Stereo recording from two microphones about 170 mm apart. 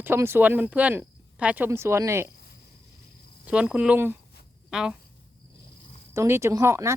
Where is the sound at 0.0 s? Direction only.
15° right (ahead or behind).